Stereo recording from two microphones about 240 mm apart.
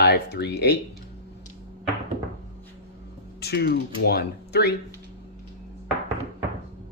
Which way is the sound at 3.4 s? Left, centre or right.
Left.